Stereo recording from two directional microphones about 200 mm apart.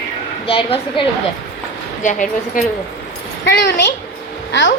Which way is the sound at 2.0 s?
40° left (ahead or behind).